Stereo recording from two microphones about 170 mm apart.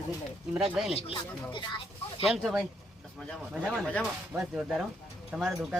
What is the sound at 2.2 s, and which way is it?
Speech, centre (ahead or behind).